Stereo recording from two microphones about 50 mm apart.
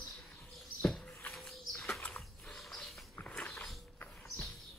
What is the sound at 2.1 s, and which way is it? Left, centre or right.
Mechanisms, centre.